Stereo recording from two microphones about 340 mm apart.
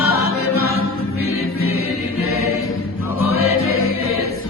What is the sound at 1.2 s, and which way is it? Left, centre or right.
Music, left.